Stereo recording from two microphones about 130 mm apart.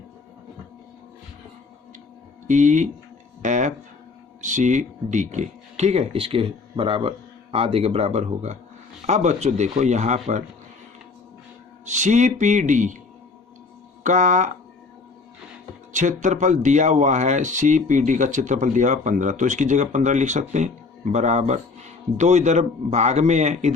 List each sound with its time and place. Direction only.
2.5 s speech: 70° right (ahead or behind)
11.9 s speech: 65° right (ahead or behind)
14.0 s speech: 70° right (ahead or behind)
15.9 s speech: 70° right (ahead or behind)